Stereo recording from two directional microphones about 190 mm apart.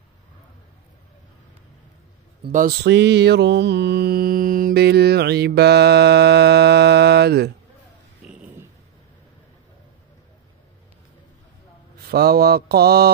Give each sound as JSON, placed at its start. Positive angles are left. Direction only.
{"t": 2.5, "sound": "speech", "side_deg": -45}
{"t": 2.9, "sound": "mantra", "side_deg": -65}
{"t": 8.3, "sound": "a sound", "side_deg": -5}
{"t": 12.1, "sound": "mantra", "side_deg": -55}